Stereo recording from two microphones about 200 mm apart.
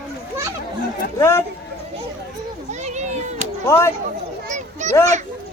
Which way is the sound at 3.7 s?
15° left (ahead or behind).